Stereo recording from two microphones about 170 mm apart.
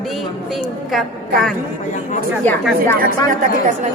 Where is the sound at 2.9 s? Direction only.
55° right (ahead or behind).